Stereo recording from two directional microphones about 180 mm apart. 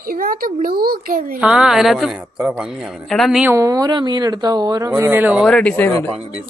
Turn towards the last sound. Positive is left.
turn(degrees=10)  # may be behind; listen again after turning